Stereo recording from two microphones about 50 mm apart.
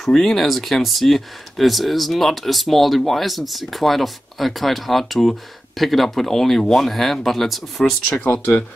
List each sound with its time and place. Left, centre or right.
0.0 s speech: centre
8.2 s speech: left